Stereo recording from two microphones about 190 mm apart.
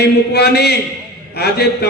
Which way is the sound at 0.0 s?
60° left (ahead or behind).